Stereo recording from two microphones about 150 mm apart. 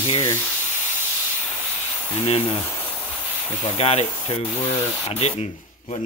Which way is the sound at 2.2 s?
40° left (ahead or behind).